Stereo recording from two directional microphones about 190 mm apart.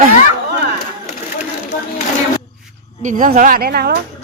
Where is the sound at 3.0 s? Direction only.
40° right (ahead or behind).